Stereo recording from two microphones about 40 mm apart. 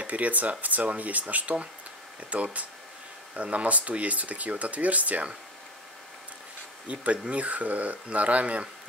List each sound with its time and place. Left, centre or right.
0.0 s speech: right
6.9 s speech: right